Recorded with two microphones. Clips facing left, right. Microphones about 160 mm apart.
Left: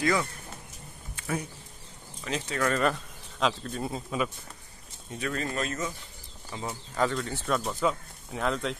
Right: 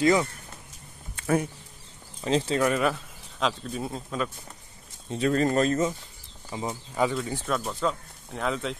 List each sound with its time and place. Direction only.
0.0 s speech: 20° right (ahead or behind)
2.2 s speech: 30° right (ahead or behind)
2.6 s speech: 5° right (ahead or behind)
5.1 s speech: 35° right (ahead or behind)
6.5 s speech: 20° right (ahead or behind)
7.4 s speech: centre (ahead or behind)